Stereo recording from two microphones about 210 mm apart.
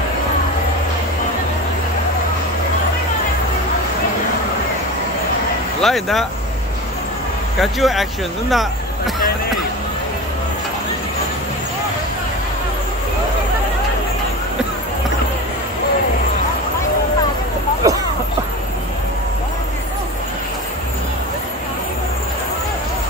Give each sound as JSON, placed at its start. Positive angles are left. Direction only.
{"t": 5.8, "sound": "speech", "side_deg": 0}
{"t": 7.6, "sound": "speech", "side_deg": 0}
{"t": 17.8, "sound": "a sound", "side_deg": -15}